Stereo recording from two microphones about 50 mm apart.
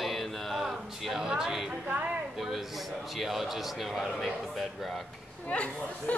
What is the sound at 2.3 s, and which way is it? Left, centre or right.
Speech, centre.